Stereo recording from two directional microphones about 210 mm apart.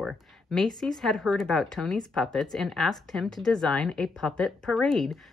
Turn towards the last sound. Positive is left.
turn(degrees=0)  # may be behind; listen again after turning